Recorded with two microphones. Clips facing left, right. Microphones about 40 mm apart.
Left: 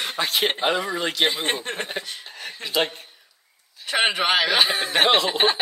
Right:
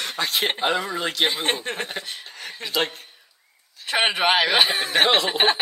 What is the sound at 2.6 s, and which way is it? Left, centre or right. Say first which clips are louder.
Speech: left 1 dB; centre.